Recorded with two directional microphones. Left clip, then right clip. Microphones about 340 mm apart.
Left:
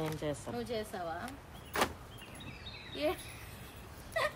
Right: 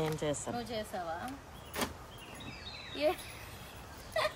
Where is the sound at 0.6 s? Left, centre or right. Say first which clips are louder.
Left 1 dB; centre.